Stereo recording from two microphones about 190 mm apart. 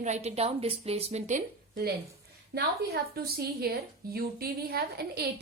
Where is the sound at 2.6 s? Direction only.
55° right (ahead or behind).